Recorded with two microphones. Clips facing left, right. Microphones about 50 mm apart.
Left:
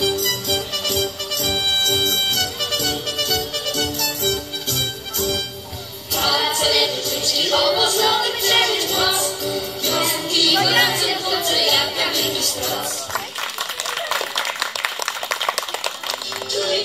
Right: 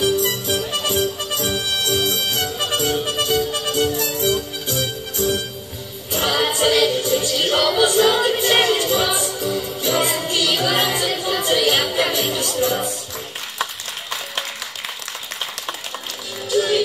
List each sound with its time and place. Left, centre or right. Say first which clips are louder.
0.1 s music: right 2 dB; centre
16.5 s music: right 4 dB; centre